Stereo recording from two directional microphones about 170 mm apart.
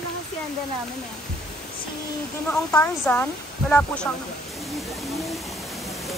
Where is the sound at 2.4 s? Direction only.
10° left (ahead or behind).